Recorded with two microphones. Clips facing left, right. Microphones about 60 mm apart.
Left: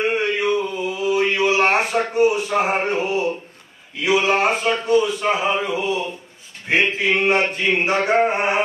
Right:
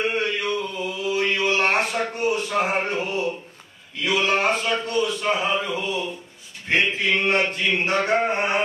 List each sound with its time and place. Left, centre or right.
0.0 s chant: centre
0.4 s mantra: centre
4.0 s a man's voice: centre